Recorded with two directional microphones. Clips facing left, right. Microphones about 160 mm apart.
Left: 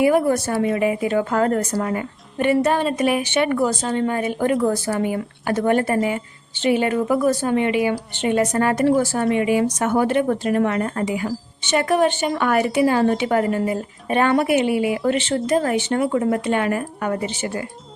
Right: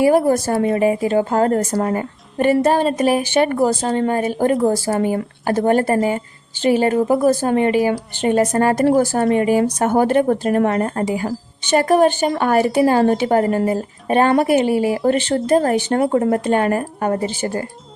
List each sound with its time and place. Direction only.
0.0 s speech: 35° right (ahead or behind)
12.4 s speech: 30° right (ahead or behind)